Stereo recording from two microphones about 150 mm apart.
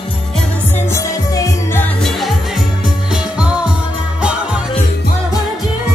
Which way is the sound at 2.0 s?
Centre (ahead or behind).